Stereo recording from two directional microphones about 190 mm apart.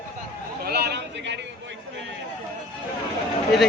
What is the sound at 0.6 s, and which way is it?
Speech, 60° right (ahead or behind).